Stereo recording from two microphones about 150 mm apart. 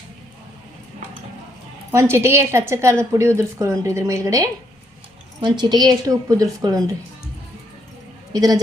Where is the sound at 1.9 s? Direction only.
15° right (ahead or behind).